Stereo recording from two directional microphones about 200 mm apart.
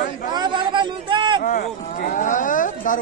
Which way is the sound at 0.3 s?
20° right (ahead or behind).